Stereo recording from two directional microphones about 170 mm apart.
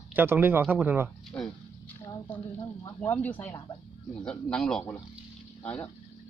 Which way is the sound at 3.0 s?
10° left (ahead or behind).